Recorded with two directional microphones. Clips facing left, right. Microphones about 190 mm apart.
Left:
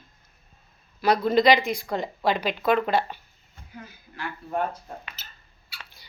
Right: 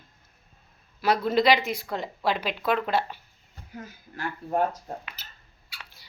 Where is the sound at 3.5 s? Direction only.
45° right (ahead or behind).